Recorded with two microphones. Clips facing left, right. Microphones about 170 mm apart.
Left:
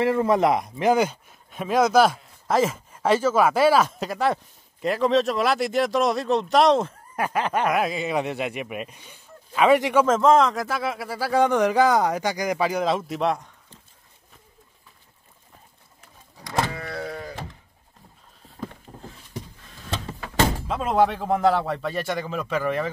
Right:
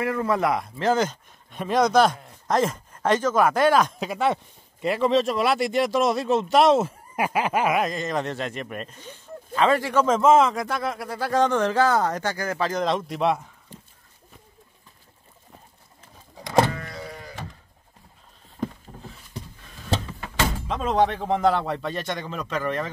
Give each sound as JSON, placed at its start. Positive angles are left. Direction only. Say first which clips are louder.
{"t": 0.0, "sound": "speech", "louder": "left 4 dB", "side_deg": 25}
{"t": 10.0, "sound": "speech", "louder": "even", "side_deg": 0}
{"t": 13.7, "sound": "dog", "louder": "right 7 dB", "side_deg": -15}
{"t": 16.7, "sound": "sheep", "louder": "left 4 dB", "side_deg": 65}
{"t": 20.6, "sound": "speech", "louder": "right 2 dB", "side_deg": 5}